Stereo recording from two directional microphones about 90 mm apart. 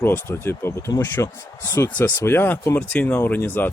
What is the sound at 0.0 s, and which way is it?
Speech, 25° left (ahead or behind).